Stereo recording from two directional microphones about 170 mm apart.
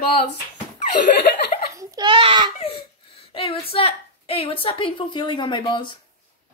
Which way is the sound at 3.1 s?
30° left (ahead or behind).